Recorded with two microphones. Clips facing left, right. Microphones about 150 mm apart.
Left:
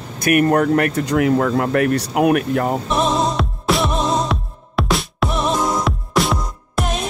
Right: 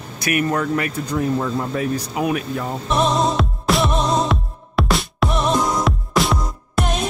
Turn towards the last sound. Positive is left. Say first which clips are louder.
# even
turn(degrees=0)  # may be behind; listen again after turning